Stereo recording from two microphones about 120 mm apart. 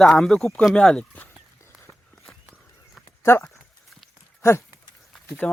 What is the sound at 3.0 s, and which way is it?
Dog, 20° left (ahead or behind).